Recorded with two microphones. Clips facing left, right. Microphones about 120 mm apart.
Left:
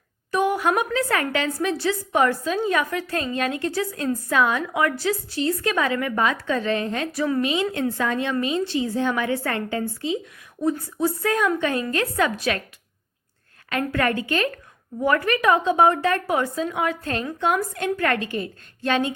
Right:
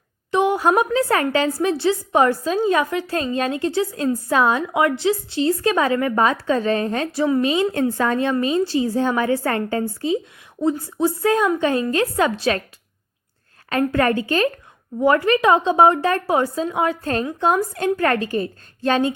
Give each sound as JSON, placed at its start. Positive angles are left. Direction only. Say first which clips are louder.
{"t": 0.3, "sound": "a woman's voice", "louder": "right 4 dB", "side_deg": -25}
{"t": 10.6, "sound": "a woman's voice", "louder": "right 3 dB", "side_deg": -25}
{"t": 13.7, "sound": "a woman's voice", "louder": "right 5 dB", "side_deg": -35}